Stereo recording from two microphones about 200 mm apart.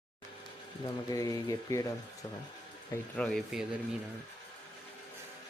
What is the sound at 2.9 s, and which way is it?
Speech, 5° left (ahead or behind).